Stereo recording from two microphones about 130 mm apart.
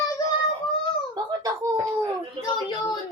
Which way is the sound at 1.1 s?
30° right (ahead or behind).